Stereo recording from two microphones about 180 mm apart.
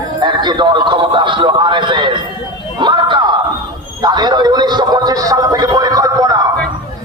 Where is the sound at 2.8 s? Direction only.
25° right (ahead or behind).